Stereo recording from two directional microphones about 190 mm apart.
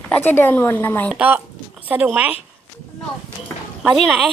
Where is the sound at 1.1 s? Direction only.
5° right (ahead or behind).